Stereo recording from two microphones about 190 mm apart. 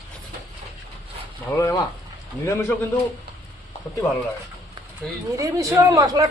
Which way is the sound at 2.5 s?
15° left (ahead or behind).